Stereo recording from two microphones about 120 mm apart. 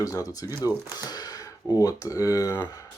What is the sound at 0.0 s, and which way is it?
Speech, 30° left (ahead or behind).